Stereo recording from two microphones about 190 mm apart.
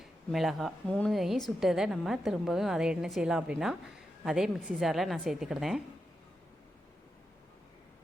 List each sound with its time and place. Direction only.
0.0 s a woman's voice: centre (ahead or behind)